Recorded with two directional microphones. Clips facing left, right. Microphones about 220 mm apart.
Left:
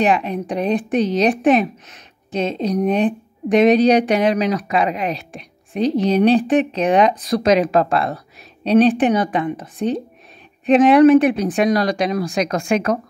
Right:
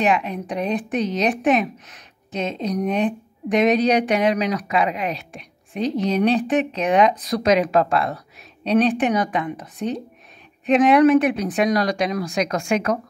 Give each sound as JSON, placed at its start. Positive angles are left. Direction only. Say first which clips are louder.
{"t": 0.0, "sound": "a woman's voice", "louder": "left 3 dB", "side_deg": 35}